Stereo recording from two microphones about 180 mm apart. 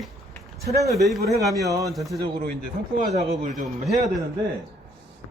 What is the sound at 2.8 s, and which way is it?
Speech, 55° right (ahead or behind).